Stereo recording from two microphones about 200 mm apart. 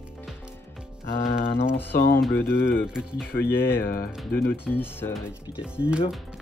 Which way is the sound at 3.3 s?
10° left (ahead or behind).